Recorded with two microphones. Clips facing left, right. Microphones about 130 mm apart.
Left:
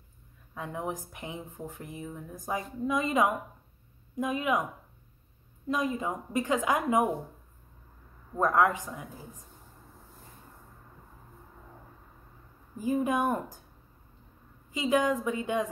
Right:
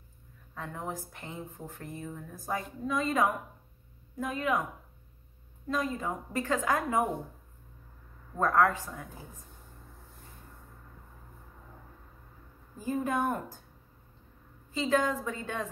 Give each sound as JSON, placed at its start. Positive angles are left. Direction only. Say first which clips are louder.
{"t": 0.6, "sound": "speech", "louder": "left 3 dB", "side_deg": 15}
{"t": 5.7, "sound": "speech", "louder": "left 2 dB", "side_deg": 15}
{"t": 8.4, "sound": "speech", "louder": "left 1 dB", "side_deg": 15}
{"t": 12.7, "sound": "speech", "louder": "left 3 dB", "side_deg": 15}
{"t": 14.7, "sound": "speech", "louder": "left 2 dB", "side_deg": 15}